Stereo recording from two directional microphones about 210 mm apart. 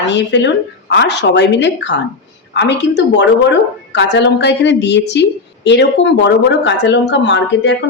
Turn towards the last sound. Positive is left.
turn(degrees=55)  # may be behind; listen again after turning